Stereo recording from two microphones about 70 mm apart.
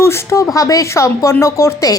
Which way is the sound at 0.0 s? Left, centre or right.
Left.